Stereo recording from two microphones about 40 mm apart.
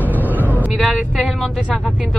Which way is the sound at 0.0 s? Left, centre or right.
Right.